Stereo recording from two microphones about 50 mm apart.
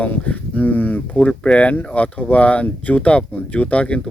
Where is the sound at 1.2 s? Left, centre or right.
Centre.